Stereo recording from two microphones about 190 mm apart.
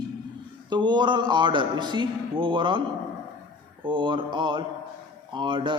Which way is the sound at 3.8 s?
25° right (ahead or behind).